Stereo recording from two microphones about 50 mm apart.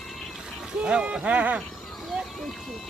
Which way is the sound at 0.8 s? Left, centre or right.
Right.